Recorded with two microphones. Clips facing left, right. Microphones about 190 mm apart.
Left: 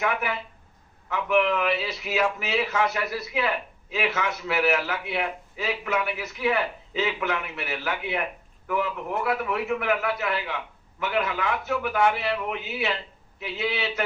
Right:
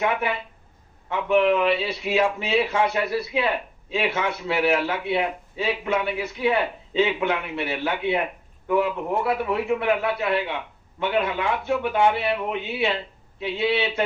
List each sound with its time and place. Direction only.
0.0 s a man's voice: 25° right (ahead or behind)